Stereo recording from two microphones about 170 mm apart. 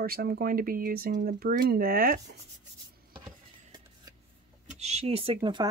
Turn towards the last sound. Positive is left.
turn(degrees=-25)  # may be behind; listen again after turning